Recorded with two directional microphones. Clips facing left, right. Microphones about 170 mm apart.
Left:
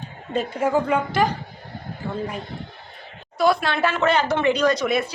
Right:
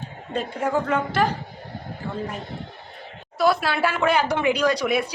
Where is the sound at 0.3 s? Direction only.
5° left (ahead or behind).